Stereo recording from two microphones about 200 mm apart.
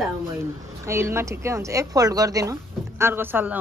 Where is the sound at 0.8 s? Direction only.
15° right (ahead or behind).